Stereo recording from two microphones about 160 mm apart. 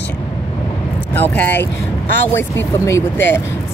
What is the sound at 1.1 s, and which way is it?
Speech, 10° left (ahead or behind).